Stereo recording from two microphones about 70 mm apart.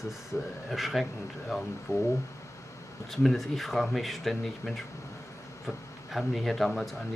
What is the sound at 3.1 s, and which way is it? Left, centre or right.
Speech, centre.